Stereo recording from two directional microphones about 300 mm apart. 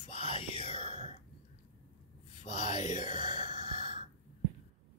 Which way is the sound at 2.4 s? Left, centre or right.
Left.